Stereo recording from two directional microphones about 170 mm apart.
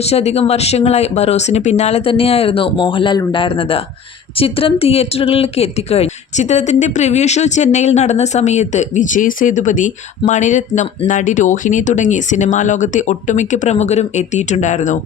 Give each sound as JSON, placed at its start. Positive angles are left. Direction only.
{"t": 0.0, "sound": "a woman's voice", "side_deg": 40}